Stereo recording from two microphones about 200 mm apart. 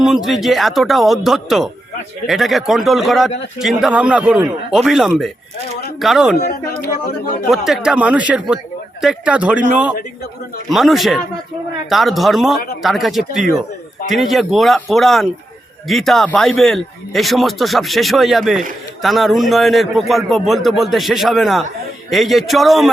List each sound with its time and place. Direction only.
0.0 s a man's voice: centre (ahead or behind)
6.3 s speech: 50° left (ahead or behind)
7.5 s a man's voice: centre (ahead or behind)